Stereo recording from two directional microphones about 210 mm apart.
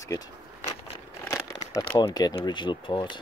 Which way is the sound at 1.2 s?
15° left (ahead or behind).